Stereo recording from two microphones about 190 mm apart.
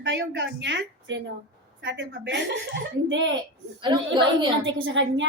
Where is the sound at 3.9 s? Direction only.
20° right (ahead or behind).